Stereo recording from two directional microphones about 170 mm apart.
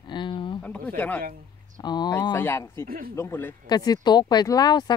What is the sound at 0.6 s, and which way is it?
Speech, 10° left (ahead or behind).